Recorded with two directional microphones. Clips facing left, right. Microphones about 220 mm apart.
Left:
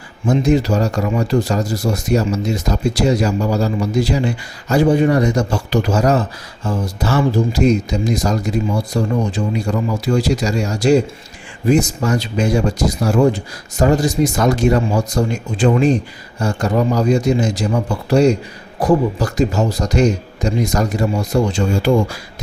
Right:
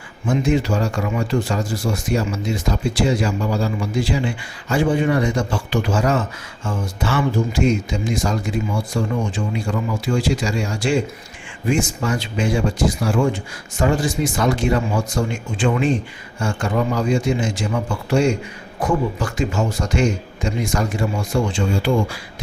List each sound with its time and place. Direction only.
0.3 s speech: 40° left (ahead or behind)